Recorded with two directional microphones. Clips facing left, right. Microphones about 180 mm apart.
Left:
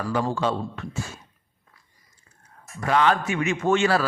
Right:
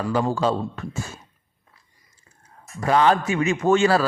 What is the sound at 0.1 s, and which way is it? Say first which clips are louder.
Speech: right 3 dB; 35° right (ahead or behind).